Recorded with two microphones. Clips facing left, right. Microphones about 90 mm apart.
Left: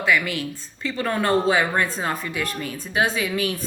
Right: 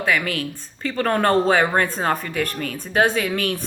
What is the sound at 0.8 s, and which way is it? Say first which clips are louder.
Speech: right 4 dB; 45° right (ahead or behind).